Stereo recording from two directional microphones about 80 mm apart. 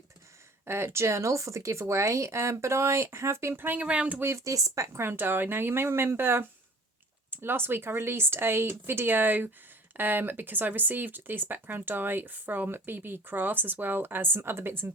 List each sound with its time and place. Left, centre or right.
0.6 s speech: right; by 4.2 s centre
4.2 s speech: right